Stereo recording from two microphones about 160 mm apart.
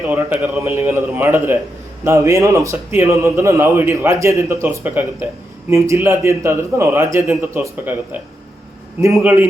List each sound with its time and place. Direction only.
0.0 s a man's voice: 10° right (ahead or behind)